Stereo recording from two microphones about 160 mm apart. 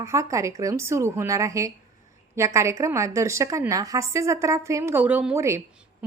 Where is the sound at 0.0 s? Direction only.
20° right (ahead or behind).